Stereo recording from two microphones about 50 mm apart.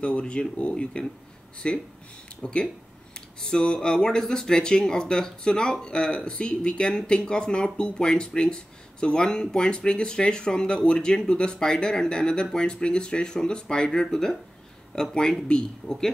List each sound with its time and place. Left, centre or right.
0.0 s speech: left